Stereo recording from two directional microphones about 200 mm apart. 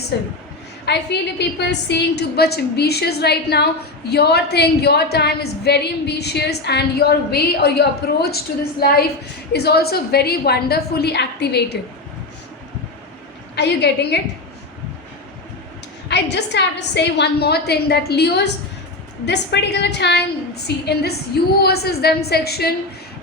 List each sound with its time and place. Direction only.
0.1 s a woman's voice: 55° left (ahead or behind)
9.5 s a woman's voice: 55° left (ahead or behind)
13.6 s a woman's voice: 55° left (ahead or behind)
16.0 s a woman's voice: 60° left (ahead or behind)